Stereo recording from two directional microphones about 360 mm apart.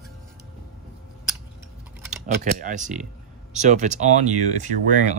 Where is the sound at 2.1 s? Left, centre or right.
Right.